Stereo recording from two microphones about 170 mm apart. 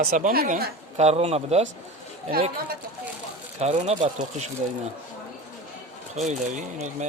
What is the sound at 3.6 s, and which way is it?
Speech, 40° right (ahead or behind).